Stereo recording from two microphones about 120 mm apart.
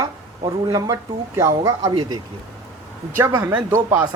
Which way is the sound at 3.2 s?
25° right (ahead or behind).